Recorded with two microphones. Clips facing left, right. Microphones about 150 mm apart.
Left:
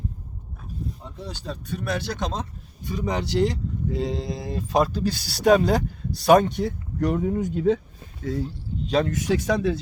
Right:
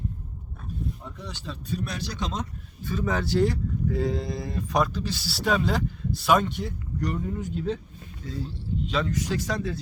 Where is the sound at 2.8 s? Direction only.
15° left (ahead or behind).